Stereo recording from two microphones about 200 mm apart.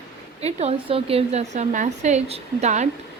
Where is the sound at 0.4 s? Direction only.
30° right (ahead or behind).